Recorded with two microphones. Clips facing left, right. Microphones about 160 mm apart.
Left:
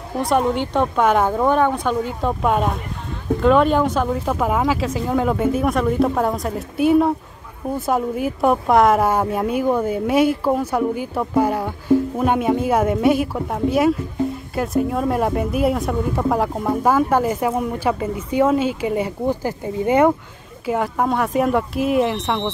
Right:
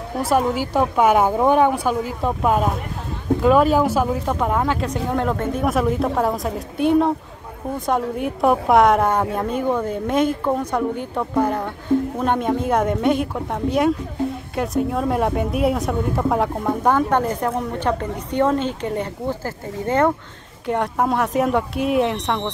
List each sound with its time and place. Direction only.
0.2 s a woman's voice: 5° right (ahead or behind); by 20.1 s 15° left (ahead or behind)
20.6 s a woman's voice: centre (ahead or behind)